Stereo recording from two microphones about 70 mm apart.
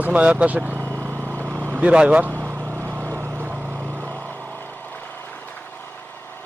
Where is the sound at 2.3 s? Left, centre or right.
Right.